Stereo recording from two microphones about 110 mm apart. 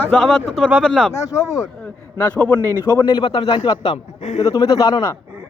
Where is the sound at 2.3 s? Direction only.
15° left (ahead or behind).